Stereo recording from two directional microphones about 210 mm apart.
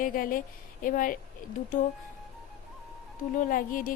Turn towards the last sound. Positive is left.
turn(degrees=40)  # may be behind; listen again after turning